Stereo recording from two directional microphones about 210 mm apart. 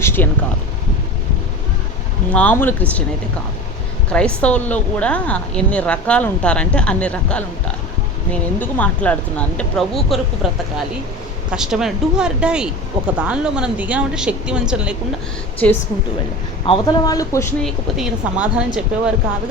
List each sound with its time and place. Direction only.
0.0 s a sound: 10° left (ahead or behind)
2.3 s speech: 5° left (ahead or behind)
4.1 s a woman's voice: 5° left (ahead or behind)
16.6 s speech: 20° left (ahead or behind)
17.6 s a woman's voice: centre (ahead or behind)